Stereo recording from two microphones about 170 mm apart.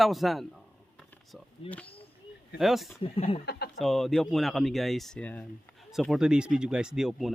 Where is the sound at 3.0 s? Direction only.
35° left (ahead or behind).